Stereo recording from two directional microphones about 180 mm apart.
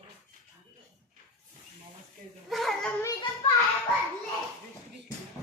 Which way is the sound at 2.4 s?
Centre (ahead or behind).